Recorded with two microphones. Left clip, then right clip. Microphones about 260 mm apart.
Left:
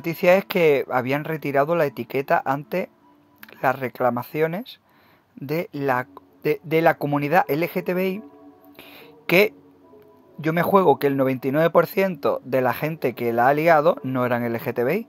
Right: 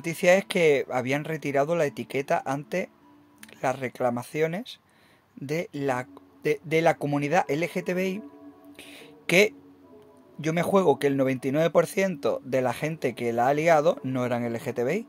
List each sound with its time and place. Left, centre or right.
0.0 s speech: centre
8.7 s a sound: centre
10.4 s speech: centre